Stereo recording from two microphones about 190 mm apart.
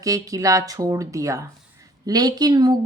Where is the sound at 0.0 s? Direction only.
15° right (ahead or behind).